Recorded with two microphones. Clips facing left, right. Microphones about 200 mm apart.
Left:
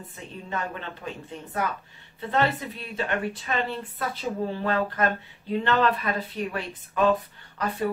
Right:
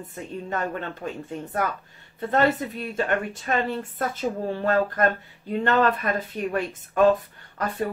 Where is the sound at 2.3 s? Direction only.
50° right (ahead or behind).